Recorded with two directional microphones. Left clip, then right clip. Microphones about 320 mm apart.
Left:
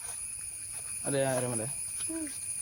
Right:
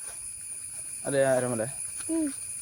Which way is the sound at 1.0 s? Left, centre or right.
Centre.